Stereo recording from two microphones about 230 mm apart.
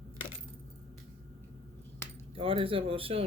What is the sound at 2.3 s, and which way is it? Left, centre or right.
Speech, right.